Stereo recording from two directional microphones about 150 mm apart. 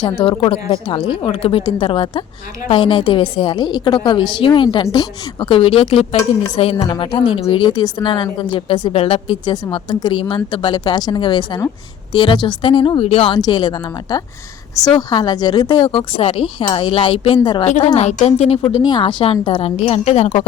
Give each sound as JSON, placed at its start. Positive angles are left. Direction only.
{"t": 0.0, "sound": "a woman's voice", "side_deg": 30}
{"t": 17.7, "sound": "a woman's voice", "side_deg": 50}
{"t": 18.7, "sound": "a woman's voice", "side_deg": 30}